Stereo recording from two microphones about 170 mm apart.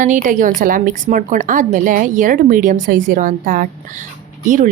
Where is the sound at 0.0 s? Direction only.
50° right (ahead or behind).